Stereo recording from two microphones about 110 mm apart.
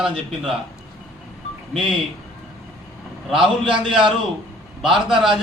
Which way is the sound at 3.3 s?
5° right (ahead or behind).